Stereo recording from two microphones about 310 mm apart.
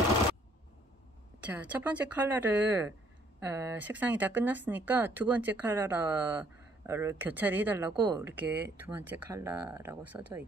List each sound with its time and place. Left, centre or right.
1.4 s speech: centre